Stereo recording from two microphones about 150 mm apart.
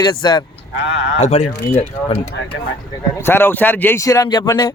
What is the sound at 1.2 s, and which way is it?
Speech, 45° left (ahead or behind).